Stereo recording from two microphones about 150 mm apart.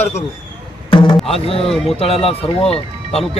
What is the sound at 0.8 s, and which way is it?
Music, 35° left (ahead or behind).